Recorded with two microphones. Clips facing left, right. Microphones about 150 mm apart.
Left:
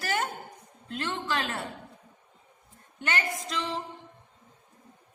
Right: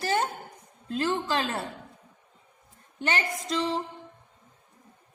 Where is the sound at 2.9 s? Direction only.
30° right (ahead or behind).